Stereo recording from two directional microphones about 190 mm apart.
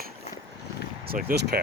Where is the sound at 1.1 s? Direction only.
50° right (ahead or behind).